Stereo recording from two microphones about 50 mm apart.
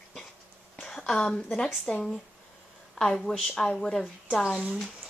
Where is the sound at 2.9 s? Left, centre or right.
Centre.